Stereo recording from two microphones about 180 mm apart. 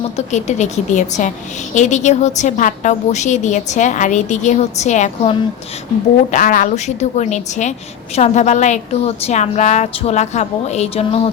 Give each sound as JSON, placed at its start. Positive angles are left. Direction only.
{"t": 0.3, "sound": "a woman's voice", "side_deg": 40}
{"t": 6.3, "sound": "a woman's voice", "side_deg": 50}